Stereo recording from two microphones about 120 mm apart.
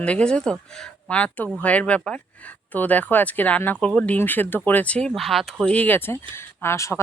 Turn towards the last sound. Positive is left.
turn(degrees=25)  # may be behind; listen again after turning